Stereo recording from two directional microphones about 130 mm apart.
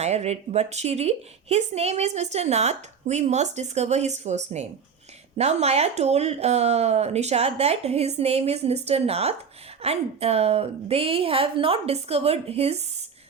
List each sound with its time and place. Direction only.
0.0 s a woman's voice: 55° right (ahead or behind)